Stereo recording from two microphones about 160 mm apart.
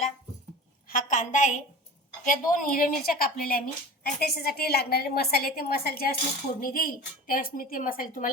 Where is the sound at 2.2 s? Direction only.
60° left (ahead or behind).